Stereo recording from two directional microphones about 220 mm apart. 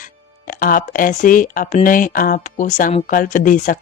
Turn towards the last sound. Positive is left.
turn(degrees=35)  # may be behind; listen again after turning